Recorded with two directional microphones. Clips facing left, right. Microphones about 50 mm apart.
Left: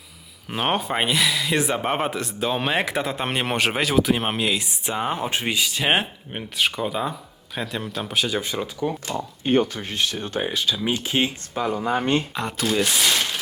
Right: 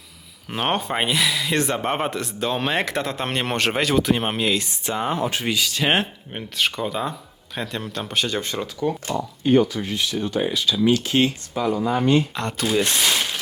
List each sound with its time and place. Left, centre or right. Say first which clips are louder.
0.5 s speech: even; centre
9.4 s speech: right 3 dB; left
10.8 s speech: right 8 dB; centre
11.5 s speech: even; left
12.3 s speech: right 1 dB; centre